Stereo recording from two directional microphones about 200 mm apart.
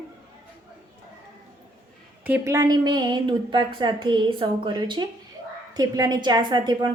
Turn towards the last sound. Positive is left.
turn(degrees=-20)  # may be behind; listen again after turning